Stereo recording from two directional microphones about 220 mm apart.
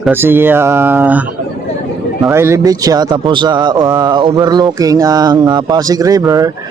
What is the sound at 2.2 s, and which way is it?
Speech, 10° right (ahead or behind).